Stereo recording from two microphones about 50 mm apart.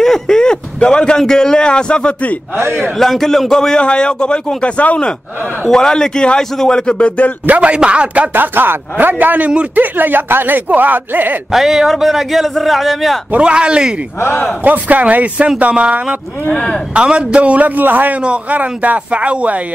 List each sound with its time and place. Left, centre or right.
0.0 s a man's voice: centre
2.6 s a man's voice: right
3.0 s a man's voice: centre; by 5.1 s left
5.7 s a man's voice: centre
7.4 s speech: right
8.3 s speech: right
11.5 s a man's voice: centre
13.4 s speech: centre
14.6 s speech: right
18.2 s speech: right